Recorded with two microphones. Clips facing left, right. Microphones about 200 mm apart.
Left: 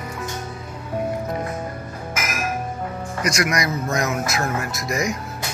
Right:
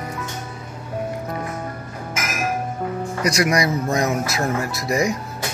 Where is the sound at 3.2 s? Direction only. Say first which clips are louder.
Right 3 dB; 30° right (ahead or behind).